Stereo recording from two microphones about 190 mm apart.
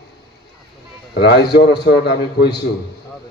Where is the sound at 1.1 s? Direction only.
60° left (ahead or behind).